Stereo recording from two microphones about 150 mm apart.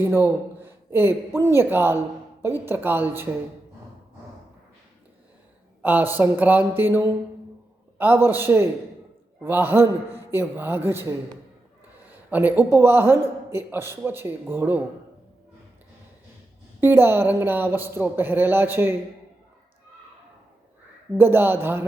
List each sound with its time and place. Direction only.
0.0 s speech: 15° right (ahead or behind)
5.8 s a man's voice: 10° right (ahead or behind)
12.0 s a sound: 10° right (ahead or behind)
12.7 s a man's voice: 15° right (ahead or behind)
16.8 s a man's voice: 15° right (ahead or behind)
21.2 s a man's voice: 15° right (ahead or behind)